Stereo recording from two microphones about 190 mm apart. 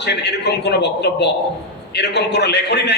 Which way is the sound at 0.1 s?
60° left (ahead or behind).